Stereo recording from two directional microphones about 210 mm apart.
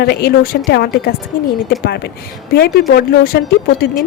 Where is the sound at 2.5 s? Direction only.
50° left (ahead or behind).